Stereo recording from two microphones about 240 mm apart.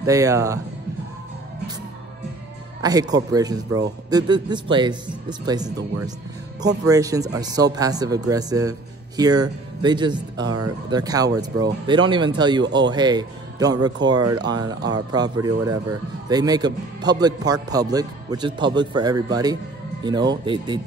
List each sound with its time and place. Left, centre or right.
0.0 s speech: centre
2.8 s speech: centre
10.4 s speech: right
10.9 s speech: centre